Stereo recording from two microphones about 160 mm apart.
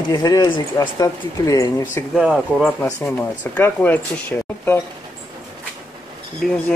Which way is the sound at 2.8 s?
15° left (ahead or behind).